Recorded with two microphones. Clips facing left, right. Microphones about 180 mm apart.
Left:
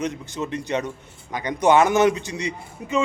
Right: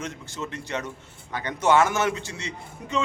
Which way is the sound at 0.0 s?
15° left (ahead or behind).